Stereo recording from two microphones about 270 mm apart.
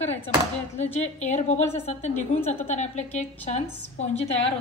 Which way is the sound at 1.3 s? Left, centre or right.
Left.